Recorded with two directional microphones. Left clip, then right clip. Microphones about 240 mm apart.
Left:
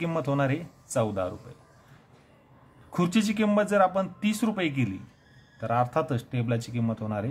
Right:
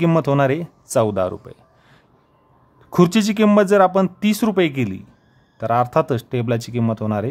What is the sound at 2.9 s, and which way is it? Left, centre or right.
Speech, right.